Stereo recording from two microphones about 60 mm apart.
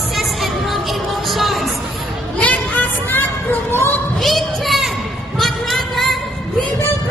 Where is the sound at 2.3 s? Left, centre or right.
Left.